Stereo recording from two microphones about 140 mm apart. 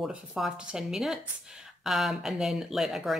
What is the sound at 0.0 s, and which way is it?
Speech, 5° right (ahead or behind).